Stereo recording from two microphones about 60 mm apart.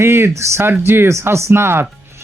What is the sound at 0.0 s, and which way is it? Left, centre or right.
Speech, right.